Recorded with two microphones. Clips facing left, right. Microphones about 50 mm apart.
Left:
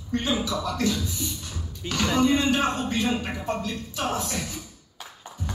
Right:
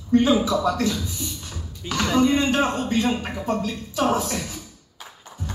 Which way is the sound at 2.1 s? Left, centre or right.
Centre.